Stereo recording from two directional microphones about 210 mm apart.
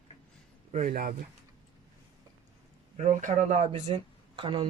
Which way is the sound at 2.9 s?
35° right (ahead or behind).